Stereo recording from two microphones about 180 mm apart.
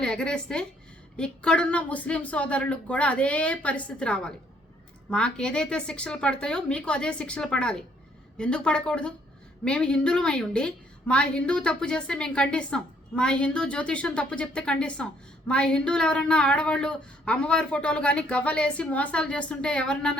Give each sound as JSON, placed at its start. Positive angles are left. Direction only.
{"t": 0.0, "sound": "a woman's voice", "side_deg": 5}